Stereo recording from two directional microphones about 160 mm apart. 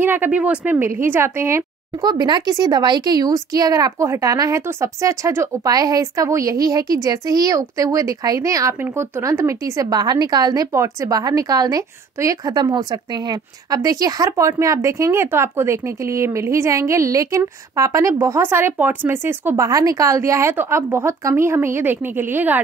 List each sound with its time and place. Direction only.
0.0 s a woman's voice: 10° right (ahead or behind)